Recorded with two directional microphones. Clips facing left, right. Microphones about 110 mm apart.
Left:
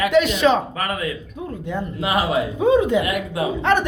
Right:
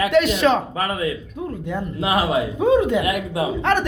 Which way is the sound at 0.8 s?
25° right (ahead or behind).